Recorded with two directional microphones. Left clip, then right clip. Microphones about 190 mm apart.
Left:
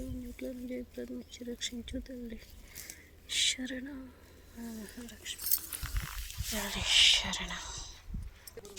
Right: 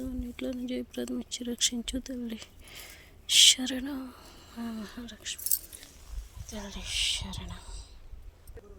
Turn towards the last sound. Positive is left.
turn(degrees=-5)  # may be behind; listen again after turning